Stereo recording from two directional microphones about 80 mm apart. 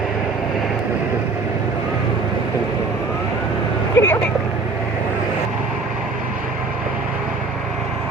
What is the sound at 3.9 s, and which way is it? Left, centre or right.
Vehicle, left.